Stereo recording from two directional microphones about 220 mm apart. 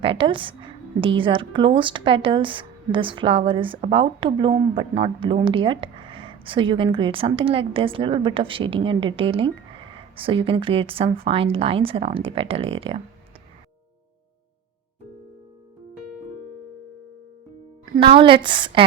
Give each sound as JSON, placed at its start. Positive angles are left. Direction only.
{"t": 0.0, "sound": "speech", "side_deg": -25}
{"t": 17.9, "sound": "speech", "side_deg": -25}